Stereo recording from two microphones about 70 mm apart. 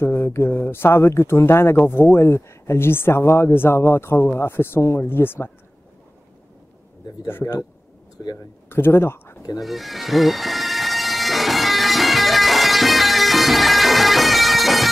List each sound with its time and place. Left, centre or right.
0.0 s speech: left
7.2 s speech: left
8.6 s speech: left
9.6 s music: centre